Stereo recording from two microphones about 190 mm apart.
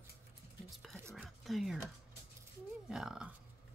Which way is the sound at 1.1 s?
Centre (ahead or behind).